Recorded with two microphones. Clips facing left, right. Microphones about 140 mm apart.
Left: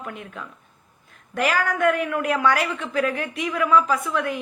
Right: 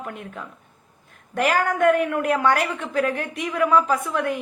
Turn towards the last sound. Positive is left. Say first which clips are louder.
# right 1 dB
turn(degrees=-50)  # may be behind; listen again after turning